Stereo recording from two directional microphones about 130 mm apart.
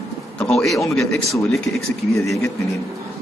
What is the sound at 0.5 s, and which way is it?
Speech, centre (ahead or behind).